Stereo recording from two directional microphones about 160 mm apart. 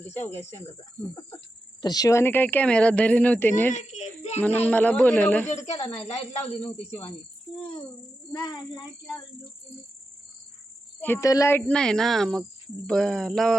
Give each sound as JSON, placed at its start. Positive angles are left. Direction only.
{"t": 1.8, "sound": "speech", "side_deg": 25}
{"t": 3.7, "sound": "a sound", "side_deg": 50}
{"t": 4.4, "sound": "speech", "side_deg": 10}
{"t": 6.0, "sound": "speech", "side_deg": 40}
{"t": 8.3, "sound": "a child's voice", "side_deg": 30}
{"t": 11.0, "sound": "speech", "side_deg": 15}